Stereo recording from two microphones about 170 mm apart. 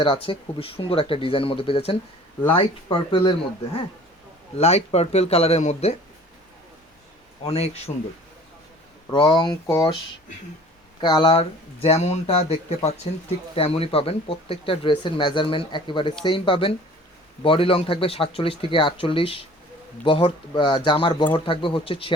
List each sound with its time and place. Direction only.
0.0 s speech: 30° left (ahead or behind)
4.5 s speech: 40° left (ahead or behind)
7.5 s speech: 40° left (ahead or behind)
9.0 s speech: 25° left (ahead or behind)
11.0 s speech: 25° left (ahead or behind)